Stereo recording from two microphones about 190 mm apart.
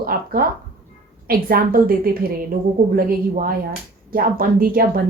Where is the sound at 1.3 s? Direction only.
50° right (ahead or behind).